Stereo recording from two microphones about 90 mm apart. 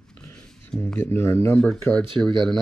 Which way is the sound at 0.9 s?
25° left (ahead or behind).